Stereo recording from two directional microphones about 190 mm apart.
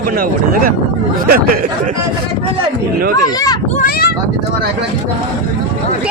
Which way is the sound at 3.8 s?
55° left (ahead or behind).